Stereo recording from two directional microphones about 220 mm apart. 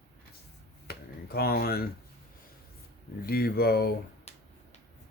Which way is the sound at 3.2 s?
45° left (ahead or behind).